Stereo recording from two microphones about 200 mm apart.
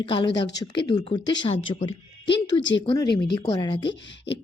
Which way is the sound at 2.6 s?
65° left (ahead or behind).